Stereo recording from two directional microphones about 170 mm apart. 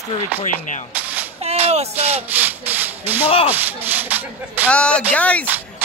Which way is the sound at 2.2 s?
10° right (ahead or behind).